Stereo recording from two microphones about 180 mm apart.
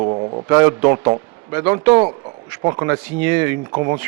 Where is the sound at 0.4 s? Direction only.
20° right (ahead or behind).